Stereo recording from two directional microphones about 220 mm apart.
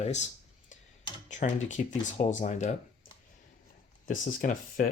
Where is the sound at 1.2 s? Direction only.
35° left (ahead or behind).